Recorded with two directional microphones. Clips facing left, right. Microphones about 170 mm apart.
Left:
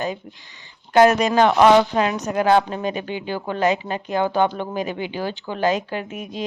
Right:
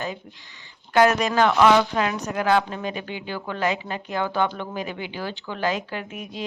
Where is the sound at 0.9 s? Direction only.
20° left (ahead or behind).